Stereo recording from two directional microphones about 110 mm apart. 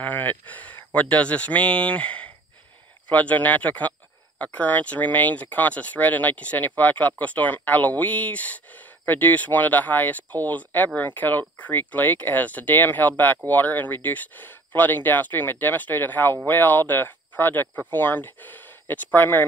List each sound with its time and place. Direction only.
0.0 s speech: 15° left (ahead or behind)